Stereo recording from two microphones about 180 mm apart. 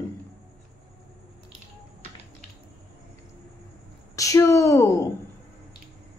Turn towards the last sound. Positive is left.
turn(degrees=15)  # may be behind; listen again after turning